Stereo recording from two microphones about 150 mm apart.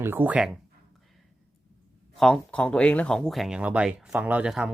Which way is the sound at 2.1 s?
5° left (ahead or behind).